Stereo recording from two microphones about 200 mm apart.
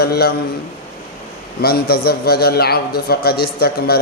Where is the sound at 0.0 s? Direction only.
50° left (ahead or behind).